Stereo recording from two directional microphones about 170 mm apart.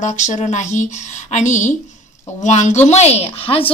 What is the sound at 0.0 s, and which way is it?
A woman's voice, 45° left (ahead or behind).